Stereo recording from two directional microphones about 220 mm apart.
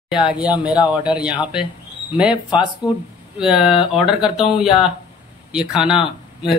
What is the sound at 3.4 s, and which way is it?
Speech, 5° right (ahead or behind).